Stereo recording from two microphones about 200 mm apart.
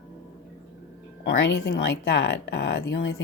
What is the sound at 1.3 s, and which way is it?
Speech, 55° left (ahead or behind).